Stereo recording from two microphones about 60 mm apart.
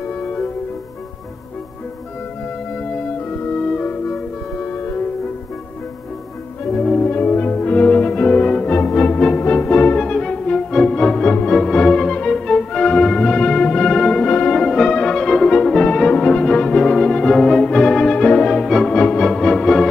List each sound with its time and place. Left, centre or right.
0.0 s music: left
2.7 s music: left
7.0 s music: left
9.9 s music: centre
18.9 s music: centre